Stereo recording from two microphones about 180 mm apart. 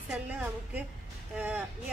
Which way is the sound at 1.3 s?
5° right (ahead or behind).